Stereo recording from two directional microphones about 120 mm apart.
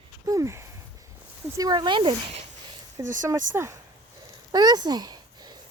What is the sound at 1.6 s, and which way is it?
Speech, 35° right (ahead or behind).